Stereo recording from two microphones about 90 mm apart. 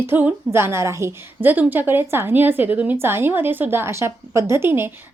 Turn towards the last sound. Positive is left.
turn(degrees=-25)  # may be behind; listen again after turning